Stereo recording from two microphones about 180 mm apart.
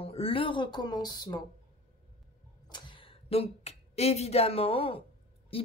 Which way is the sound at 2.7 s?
30° left (ahead or behind).